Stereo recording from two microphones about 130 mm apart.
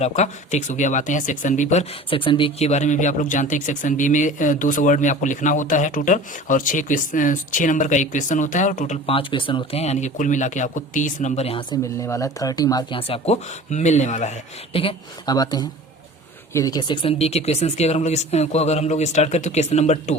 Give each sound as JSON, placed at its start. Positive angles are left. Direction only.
{"t": 0.0, "sound": "speech", "side_deg": 65}
{"t": 2.6, "sound": "speech", "side_deg": 65}
{"t": 9.0, "sound": "speech", "side_deg": 45}
{"t": 9.8, "sound": "speech", "side_deg": 60}
{"t": 11.7, "sound": "speech", "side_deg": 25}
{"t": 13.0, "sound": "speech", "side_deg": 50}
{"t": 14.7, "sound": "speech", "side_deg": 45}
{"t": 15.3, "sound": "speech", "side_deg": 30}
{"t": 17.0, "sound": "speech", "side_deg": 50}